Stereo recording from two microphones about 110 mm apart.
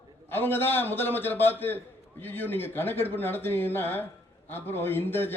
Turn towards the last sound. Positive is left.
turn(degrees=20)  # may be behind; listen again after turning